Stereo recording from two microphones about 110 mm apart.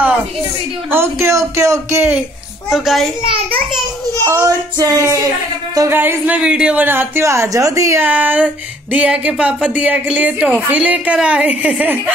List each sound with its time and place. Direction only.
0.8 s a woman's voice: 20° right (ahead or behind)
2.7 s a child's voice: centre (ahead or behind)
4.2 s a woman's voice: 25° right (ahead or behind)
5.9 s a woman's voice: 20° right (ahead or behind)
8.0 s speech: 15° right (ahead or behind)